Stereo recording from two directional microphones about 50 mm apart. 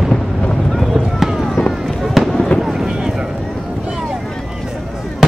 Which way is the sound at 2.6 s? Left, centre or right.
Centre.